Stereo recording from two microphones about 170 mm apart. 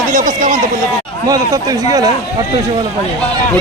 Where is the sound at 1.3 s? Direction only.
20° right (ahead or behind).